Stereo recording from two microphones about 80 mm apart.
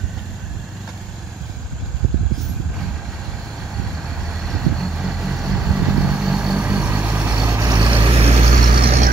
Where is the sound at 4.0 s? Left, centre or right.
Centre; by 7.3 s right.